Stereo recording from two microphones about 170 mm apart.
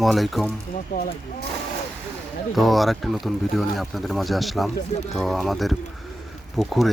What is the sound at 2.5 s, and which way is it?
Speech, centre (ahead or behind).